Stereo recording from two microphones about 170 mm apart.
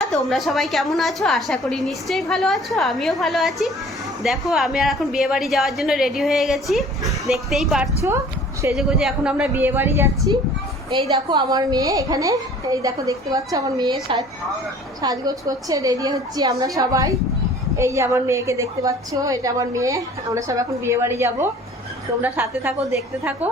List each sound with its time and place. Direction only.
0.1 s a woman's voice: centre (ahead or behind)
10.9 s a woman's voice: 30° right (ahead or behind); by 22.7 s 15° right (ahead or behind)